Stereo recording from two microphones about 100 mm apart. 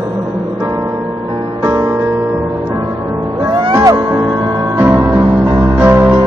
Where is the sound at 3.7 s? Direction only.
35° right (ahead or behind).